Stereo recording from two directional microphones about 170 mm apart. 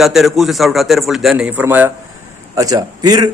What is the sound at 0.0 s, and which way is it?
A man's voice, centre (ahead or behind).